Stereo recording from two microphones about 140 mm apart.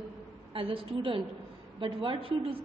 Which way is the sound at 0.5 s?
40° right (ahead or behind).